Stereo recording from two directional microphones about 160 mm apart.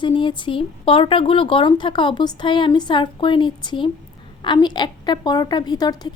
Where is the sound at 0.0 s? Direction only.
30° left (ahead or behind).